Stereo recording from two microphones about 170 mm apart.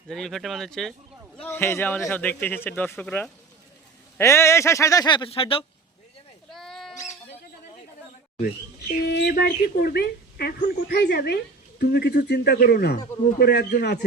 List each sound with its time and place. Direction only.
0.1 s speech: centre (ahead or behind)
1.4 s speech: 10° left (ahead or behind); by 5.6 s 35° left (ahead or behind)
6.5 s sheep: centre (ahead or behind)
6.9 s a sound: 45° left (ahead or behind)
9.0 s speech: 70° left (ahead or behind)